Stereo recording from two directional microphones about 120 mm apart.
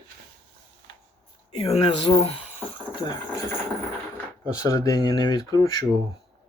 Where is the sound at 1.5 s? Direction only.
50° left (ahead or behind).